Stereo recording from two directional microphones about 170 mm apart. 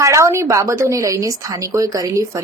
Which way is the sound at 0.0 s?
15° right (ahead or behind).